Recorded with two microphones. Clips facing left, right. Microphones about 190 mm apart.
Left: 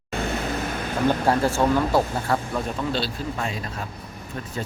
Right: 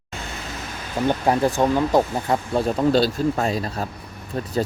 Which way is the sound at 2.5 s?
40° right (ahead or behind).